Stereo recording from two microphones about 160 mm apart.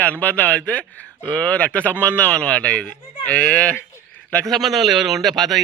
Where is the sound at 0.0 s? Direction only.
10° left (ahead or behind).